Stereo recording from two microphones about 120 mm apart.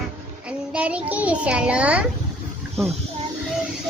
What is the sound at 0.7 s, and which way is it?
Child singing, 10° right (ahead or behind).